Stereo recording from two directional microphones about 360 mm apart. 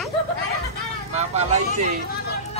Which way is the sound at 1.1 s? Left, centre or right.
Centre.